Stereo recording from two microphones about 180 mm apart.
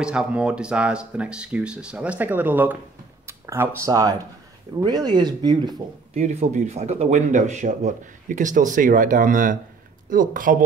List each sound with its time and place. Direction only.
0.0 s speech: 5° right (ahead or behind); by 5.8 s 25° right (ahead or behind)
6.1 s speech: 40° right (ahead or behind)